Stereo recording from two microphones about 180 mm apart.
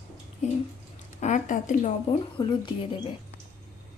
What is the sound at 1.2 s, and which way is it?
Speech, 40° left (ahead or behind).